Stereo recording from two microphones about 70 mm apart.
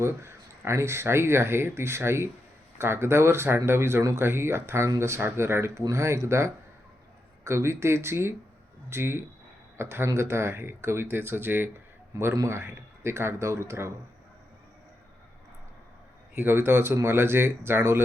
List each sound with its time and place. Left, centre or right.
0.0 s speech: right
12.1 s a man's voice: right
16.3 s speech: right